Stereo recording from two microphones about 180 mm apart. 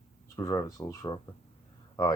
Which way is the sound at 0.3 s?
20° left (ahead or behind).